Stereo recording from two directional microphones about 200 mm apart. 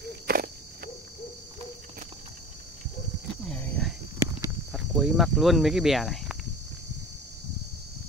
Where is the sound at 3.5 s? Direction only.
5° left (ahead or behind).